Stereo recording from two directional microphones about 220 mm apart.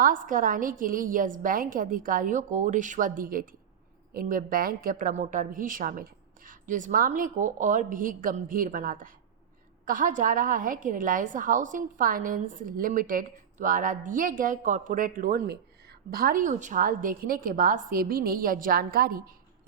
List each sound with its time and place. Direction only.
0.0 s a woman's voice: 40° right (ahead or behind)